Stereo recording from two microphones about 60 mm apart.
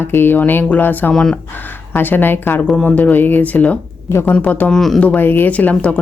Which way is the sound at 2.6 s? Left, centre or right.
Left.